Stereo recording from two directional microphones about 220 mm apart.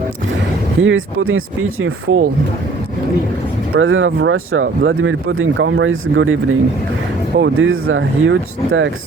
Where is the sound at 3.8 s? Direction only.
65° right (ahead or behind).